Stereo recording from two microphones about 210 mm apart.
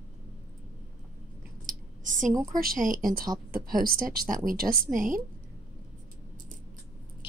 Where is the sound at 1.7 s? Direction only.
40° right (ahead or behind).